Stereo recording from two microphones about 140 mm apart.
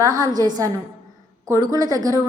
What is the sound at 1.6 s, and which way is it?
Speech, 25° right (ahead or behind).